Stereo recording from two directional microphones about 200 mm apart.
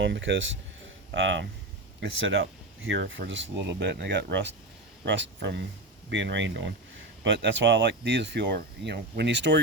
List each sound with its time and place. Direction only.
0.0 s speech: 65° right (ahead or behind)